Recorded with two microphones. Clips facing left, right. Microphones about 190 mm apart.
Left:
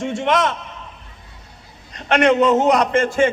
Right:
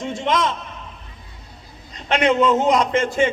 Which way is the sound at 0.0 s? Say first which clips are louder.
Left 3 dB; 65° left (ahead or behind).